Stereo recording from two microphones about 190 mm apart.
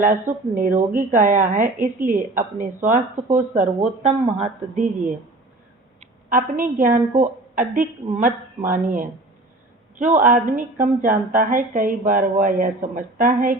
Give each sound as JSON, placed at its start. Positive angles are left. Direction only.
{"t": 0.0, "sound": "a woman's voice", "side_deg": -45}